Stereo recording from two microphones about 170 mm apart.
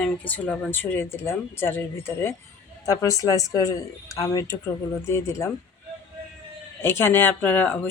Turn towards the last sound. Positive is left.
turn(degrees=10)  # may be behind; listen again after turning